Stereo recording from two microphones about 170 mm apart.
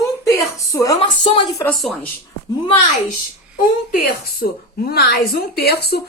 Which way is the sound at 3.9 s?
60° left (ahead or behind).